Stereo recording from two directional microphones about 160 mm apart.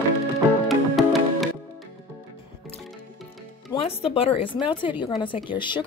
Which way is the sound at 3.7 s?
35° left (ahead or behind).